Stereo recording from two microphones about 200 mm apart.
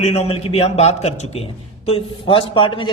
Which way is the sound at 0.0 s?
30° left (ahead or behind).